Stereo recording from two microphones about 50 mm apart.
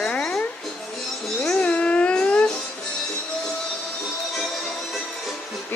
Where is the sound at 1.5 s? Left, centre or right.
Left.